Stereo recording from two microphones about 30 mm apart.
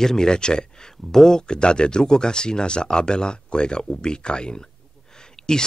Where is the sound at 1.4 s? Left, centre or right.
Left.